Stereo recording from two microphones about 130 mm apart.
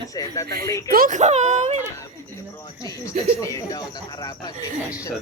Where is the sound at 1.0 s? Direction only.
70° right (ahead or behind).